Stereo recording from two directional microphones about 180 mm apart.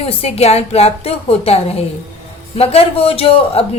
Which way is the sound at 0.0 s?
35° left (ahead or behind).